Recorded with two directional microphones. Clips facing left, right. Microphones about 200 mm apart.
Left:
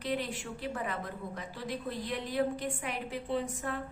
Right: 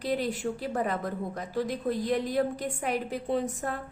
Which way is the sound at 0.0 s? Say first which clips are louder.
Right 6 dB; 35° right (ahead or behind).